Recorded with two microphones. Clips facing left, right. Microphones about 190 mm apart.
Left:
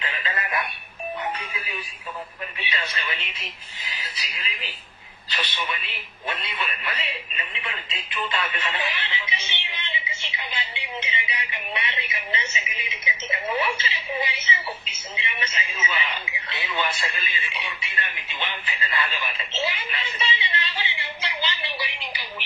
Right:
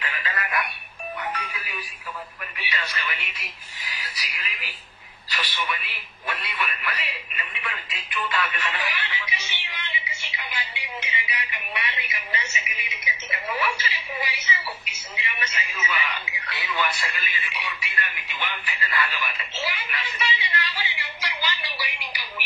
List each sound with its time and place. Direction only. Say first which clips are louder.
0.0 s telephone: left 1 dB; 25° left (ahead or behind)
1.3 s music: left 1 dB; 25° left (ahead or behind)
2.6 s speech: even; 25° left (ahead or behind)